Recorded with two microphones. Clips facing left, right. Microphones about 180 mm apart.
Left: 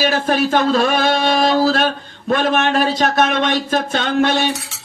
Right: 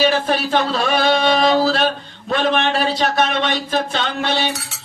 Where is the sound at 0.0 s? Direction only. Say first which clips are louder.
Left 1 dB; 45° left (ahead or behind).